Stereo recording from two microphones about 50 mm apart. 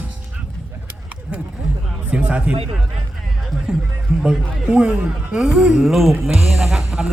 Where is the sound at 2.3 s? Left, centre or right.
Right.